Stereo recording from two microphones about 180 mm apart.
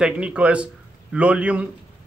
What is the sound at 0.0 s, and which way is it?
Speech, 5° right (ahead or behind).